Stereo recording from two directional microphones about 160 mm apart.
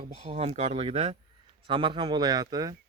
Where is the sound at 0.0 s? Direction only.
35° right (ahead or behind).